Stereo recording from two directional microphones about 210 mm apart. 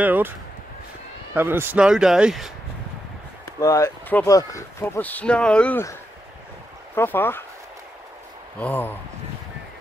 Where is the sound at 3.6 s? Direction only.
15° left (ahead or behind).